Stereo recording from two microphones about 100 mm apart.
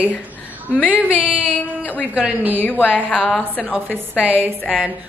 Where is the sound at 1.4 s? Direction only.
15° left (ahead or behind).